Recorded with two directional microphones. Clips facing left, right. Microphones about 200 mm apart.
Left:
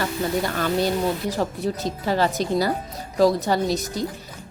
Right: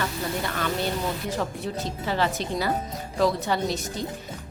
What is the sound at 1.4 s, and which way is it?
Speech, 40° left (ahead or behind).